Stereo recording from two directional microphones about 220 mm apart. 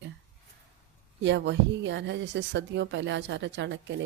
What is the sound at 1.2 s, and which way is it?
A woman's voice, 55° right (ahead or behind).